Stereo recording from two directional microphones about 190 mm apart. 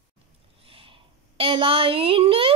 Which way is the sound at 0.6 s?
30° right (ahead or behind).